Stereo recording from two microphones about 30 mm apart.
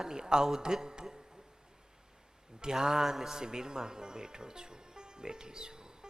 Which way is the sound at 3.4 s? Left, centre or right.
Right.